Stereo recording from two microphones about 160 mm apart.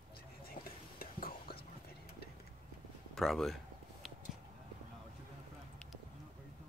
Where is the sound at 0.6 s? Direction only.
65° left (ahead or behind).